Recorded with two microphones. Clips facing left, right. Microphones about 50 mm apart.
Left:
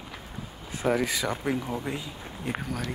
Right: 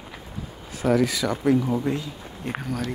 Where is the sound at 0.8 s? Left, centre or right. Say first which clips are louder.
Right 5 dB; left.